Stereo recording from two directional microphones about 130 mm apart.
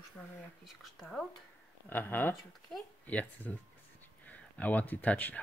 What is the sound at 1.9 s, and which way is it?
Speech, 15° left (ahead or behind).